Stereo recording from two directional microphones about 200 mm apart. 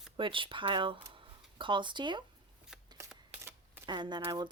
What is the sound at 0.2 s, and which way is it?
Speech, 25° right (ahead or behind).